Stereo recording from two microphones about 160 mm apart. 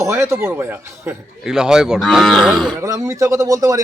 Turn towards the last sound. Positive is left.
turn(degrees=-20)  # may be behind; listen again after turning